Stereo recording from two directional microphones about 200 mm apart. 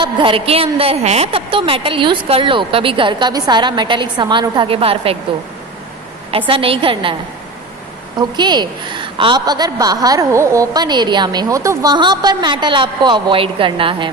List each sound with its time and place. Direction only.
0.0 s a woman's voice: 25° right (ahead or behind)
6.3 s a woman's voice: 25° right (ahead or behind)
8.2 s a woman's voice: 20° right (ahead or behind)